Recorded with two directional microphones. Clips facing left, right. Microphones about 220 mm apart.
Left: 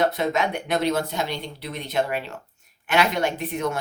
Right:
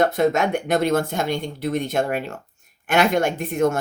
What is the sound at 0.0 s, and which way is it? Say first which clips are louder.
Speech: right 4 dB; 50° right (ahead or behind).